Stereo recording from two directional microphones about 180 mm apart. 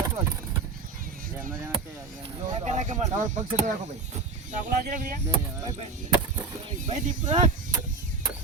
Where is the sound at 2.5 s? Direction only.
40° right (ahead or behind).